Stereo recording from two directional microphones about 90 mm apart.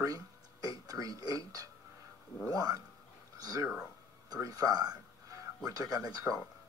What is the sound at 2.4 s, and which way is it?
Speech, 45° right (ahead or behind).